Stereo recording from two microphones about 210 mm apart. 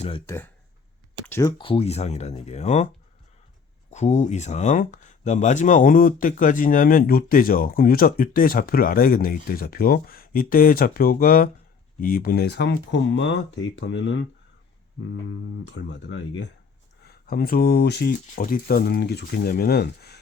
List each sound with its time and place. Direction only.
0.3 s speech: 10° left (ahead or behind); by 14.2 s 60° left (ahead or behind)
15.6 s speech: 55° left (ahead or behind)
17.0 s speech: 45° left (ahead or behind)